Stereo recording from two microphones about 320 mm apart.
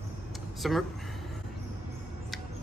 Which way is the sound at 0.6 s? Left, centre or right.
Centre.